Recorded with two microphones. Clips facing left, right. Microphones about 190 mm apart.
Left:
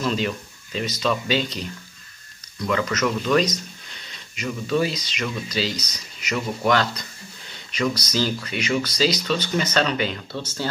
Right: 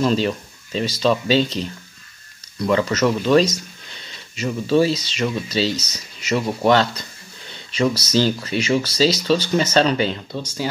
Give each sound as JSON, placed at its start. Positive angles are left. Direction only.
{"t": 0.0, "sound": "speech", "side_deg": -30}
{"t": 2.6, "sound": "speech", "side_deg": -30}
{"t": 10.3, "sound": "speech", "side_deg": -10}